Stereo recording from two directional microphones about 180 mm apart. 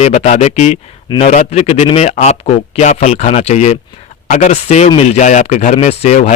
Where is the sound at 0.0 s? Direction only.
40° left (ahead or behind).